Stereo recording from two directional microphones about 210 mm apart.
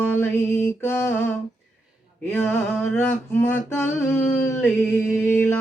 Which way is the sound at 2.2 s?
10° left (ahead or behind).